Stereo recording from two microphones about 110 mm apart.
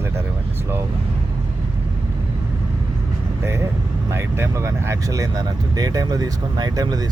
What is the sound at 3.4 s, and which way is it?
Speech, 25° right (ahead or behind).